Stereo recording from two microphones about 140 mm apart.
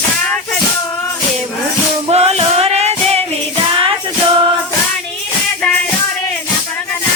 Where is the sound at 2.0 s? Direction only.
50° right (ahead or behind).